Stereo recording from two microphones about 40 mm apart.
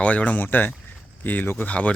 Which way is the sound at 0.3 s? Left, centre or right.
Left.